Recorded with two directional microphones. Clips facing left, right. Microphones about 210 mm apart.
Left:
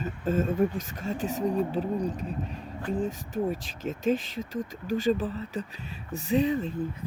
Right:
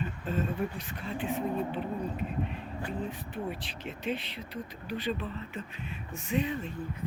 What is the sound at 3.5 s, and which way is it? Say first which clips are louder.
Speech: left 6 dB; 45° left (ahead or behind).